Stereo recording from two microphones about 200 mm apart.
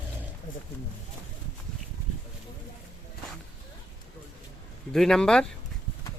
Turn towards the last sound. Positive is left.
turn(degrees=5)  # may be behind; listen again after turning